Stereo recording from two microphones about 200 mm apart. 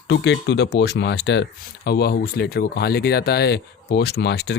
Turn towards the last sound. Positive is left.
turn(degrees=60)  # may be behind; listen again after turning